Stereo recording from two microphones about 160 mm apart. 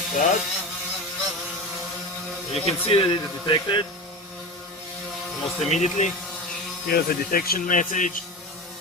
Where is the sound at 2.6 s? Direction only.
35° left (ahead or behind).